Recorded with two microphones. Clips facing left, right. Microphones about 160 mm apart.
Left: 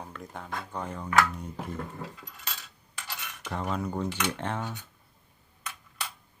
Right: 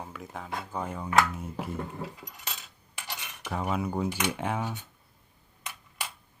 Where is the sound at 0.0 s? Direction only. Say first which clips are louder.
Right 1 dB; 5° right (ahead or behind).